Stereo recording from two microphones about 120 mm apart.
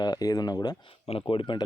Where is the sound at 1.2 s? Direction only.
40° left (ahead or behind).